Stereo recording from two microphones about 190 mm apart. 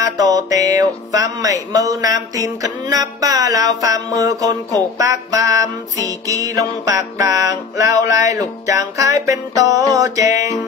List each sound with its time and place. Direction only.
0.0 s music: 20° right (ahead or behind)